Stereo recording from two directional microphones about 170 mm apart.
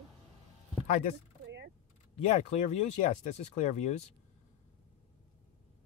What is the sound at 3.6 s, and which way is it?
Speech, 40° left (ahead or behind).